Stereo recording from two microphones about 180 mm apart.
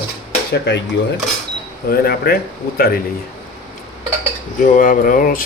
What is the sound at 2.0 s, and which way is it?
Speech, 60° left (ahead or behind).